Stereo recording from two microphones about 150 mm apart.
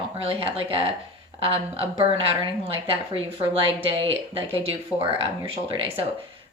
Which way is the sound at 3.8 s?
35° right (ahead or behind).